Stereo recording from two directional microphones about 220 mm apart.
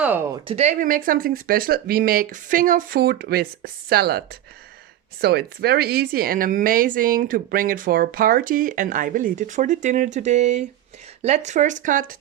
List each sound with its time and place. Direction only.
0.0 s speech: 5° right (ahead or behind)
0.4 s speech: 30° right (ahead or behind)